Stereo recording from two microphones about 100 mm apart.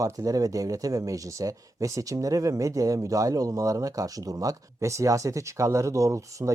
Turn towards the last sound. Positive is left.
turn(degrees=-30)  # may be behind; listen again after turning